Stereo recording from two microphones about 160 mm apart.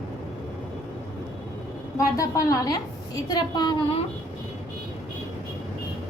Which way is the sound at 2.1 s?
20° left (ahead or behind).